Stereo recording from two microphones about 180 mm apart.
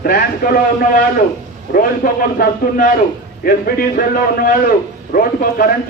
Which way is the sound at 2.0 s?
60° left (ahead or behind).